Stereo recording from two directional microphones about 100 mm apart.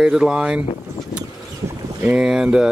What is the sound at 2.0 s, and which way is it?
Speech, 15° right (ahead or behind).